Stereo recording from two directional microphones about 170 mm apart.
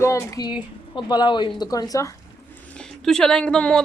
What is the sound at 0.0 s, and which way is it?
Speech, 20° left (ahead or behind).